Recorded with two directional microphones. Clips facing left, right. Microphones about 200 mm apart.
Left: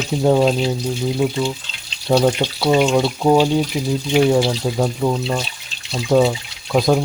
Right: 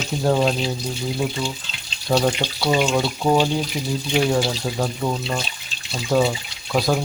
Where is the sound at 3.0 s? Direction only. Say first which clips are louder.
Left 4 dB; 20° left (ahead or behind).